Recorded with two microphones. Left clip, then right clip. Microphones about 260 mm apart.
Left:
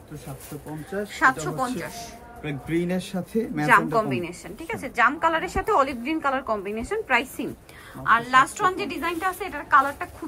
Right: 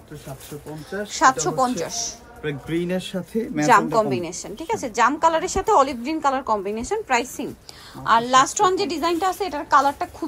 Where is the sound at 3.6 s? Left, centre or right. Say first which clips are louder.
Right 3 dB; centre.